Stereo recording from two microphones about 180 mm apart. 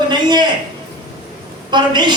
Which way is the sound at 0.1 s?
25° right (ahead or behind).